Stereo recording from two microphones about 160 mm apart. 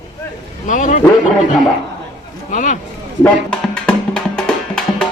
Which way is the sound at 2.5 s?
55° left (ahead or behind).